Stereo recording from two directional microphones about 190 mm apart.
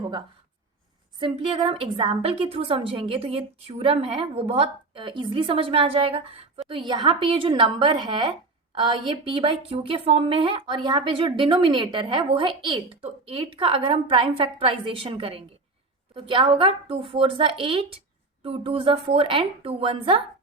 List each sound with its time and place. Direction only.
1.2 s speech: 25° right (ahead or behind)